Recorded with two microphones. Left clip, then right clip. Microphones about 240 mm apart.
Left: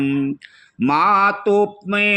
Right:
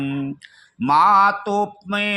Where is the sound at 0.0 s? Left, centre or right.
Right.